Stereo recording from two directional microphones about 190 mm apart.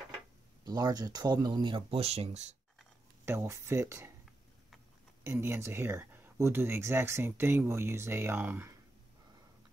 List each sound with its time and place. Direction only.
0.7 s speech: 20° right (ahead or behind)
3.3 s speech: 15° right (ahead or behind)
5.2 s speech: 15° right (ahead or behind)